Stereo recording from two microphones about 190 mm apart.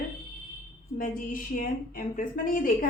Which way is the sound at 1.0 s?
45° left (ahead or behind).